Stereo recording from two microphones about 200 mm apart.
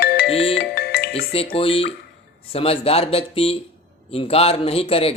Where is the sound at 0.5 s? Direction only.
50° left (ahead or behind).